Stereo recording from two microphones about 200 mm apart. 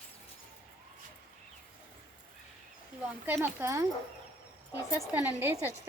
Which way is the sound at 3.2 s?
10° right (ahead or behind).